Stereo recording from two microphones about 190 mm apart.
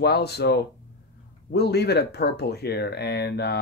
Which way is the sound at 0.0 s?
60° left (ahead or behind).